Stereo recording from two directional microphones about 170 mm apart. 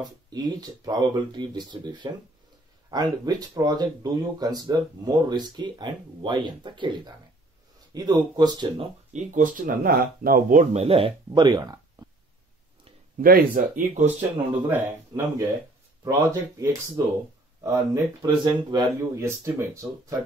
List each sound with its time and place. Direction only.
0.0 s speech: 25° right (ahead or behind)
9.1 s speech: 50° right (ahead or behind); by 12.1 s 25° right (ahead or behind)
13.2 s speech: 55° right (ahead or behind)
14.7 s speech: 15° right (ahead or behind)